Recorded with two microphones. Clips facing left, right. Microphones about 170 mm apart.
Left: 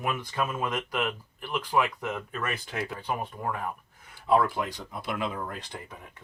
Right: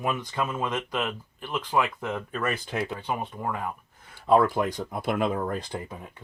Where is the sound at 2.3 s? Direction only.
35° right (ahead or behind).